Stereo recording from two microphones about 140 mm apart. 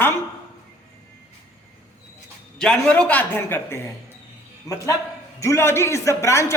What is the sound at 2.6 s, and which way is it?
A woman's voice, 5° left (ahead or behind).